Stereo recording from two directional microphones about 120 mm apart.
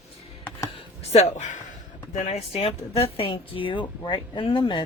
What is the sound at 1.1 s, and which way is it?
Speech, 75° left (ahead or behind).